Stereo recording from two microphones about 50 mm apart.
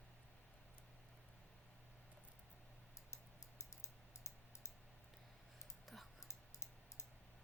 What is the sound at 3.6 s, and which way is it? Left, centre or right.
Typing, left.